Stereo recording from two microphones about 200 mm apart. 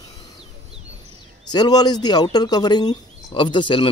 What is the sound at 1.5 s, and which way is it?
Speech, 20° left (ahead or behind).